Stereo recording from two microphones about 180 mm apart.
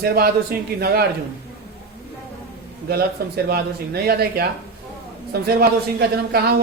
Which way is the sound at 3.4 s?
60° right (ahead or behind).